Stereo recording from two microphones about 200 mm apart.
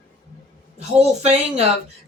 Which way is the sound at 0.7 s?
35° right (ahead or behind).